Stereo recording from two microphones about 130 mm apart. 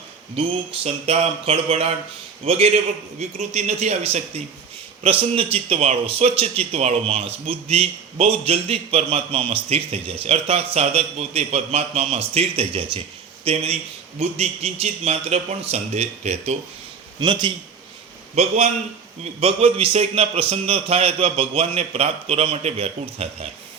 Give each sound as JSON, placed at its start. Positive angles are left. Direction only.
{"t": 0.3, "sound": "a man's voice", "side_deg": -45}
{"t": 5.0, "sound": "a man's voice", "side_deg": -45}
{"t": 17.2, "sound": "a man's voice", "side_deg": -35}
{"t": 18.3, "sound": "a man's voice", "side_deg": -55}